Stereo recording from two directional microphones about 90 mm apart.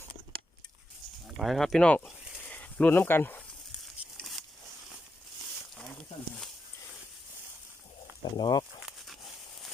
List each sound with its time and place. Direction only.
1.4 s speech: centre (ahead or behind); by 3.4 s 25° left (ahead or behind)
4.2 s a sound: centre (ahead or behind)
8.2 s speech: 55° left (ahead or behind)